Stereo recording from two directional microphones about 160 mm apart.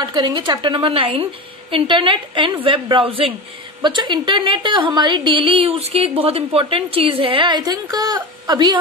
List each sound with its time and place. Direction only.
0.0 s a woman's voice: 30° right (ahead or behind)